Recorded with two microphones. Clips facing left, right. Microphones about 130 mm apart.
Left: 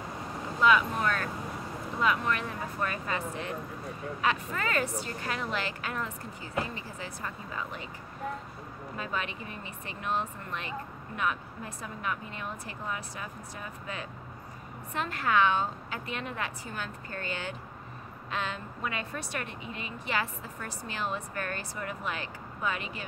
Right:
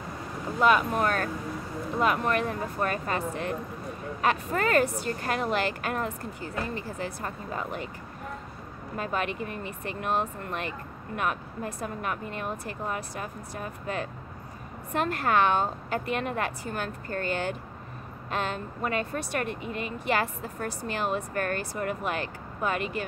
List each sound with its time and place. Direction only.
0.6 s speech: 50° right (ahead or behind)
8.9 s speech: 50° right (ahead or behind)